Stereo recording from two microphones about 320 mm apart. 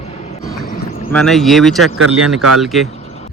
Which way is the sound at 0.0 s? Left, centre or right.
Centre.